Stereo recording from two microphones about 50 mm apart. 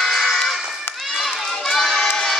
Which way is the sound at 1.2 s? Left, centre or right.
Centre.